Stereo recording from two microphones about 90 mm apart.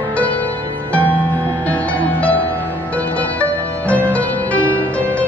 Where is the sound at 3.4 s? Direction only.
15° left (ahead or behind).